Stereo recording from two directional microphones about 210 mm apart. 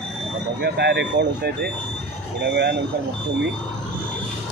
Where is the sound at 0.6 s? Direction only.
50° right (ahead or behind).